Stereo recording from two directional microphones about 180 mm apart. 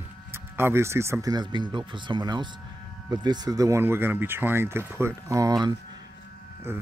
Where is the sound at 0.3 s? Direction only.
15° right (ahead or behind).